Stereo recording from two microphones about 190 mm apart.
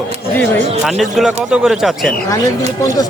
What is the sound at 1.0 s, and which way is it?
Speech, centre (ahead or behind).